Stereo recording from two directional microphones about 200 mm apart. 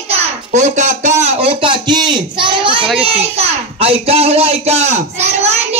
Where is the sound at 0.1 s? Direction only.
35° right (ahead or behind).